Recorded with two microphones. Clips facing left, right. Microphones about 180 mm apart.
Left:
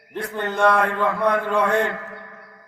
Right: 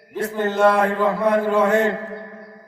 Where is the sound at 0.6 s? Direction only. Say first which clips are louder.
Right 2 dB; 25° right (ahead or behind).